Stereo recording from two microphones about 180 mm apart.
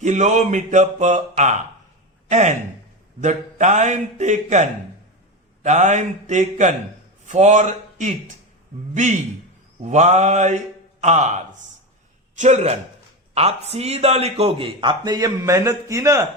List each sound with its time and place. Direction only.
0.0 s speech: 40° right (ahead or behind)
5.6 s speech: 40° right (ahead or behind)
9.8 s speech: 40° right (ahead or behind)
12.4 s a man's voice: 40° right (ahead or behind); by 16.2 s 15° right (ahead or behind)